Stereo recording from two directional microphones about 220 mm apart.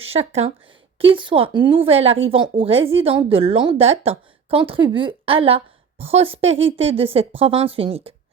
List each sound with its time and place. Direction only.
0.0 s a woman's voice: 25° right (ahead or behind)